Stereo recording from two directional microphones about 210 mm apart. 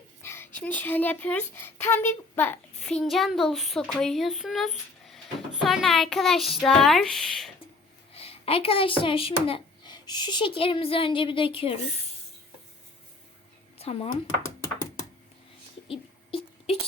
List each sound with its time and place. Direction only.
0.2 s speech: 10° left (ahead or behind)
8.1 s speech: 25° left (ahead or behind)
13.7 s speech: 30° left (ahead or behind)
14.4 s music: 15° left (ahead or behind)
15.9 s a sound: 25° left (ahead or behind)